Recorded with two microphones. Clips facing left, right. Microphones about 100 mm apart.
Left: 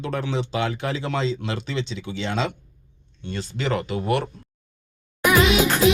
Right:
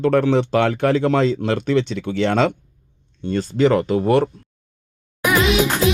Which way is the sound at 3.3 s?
45° right (ahead or behind).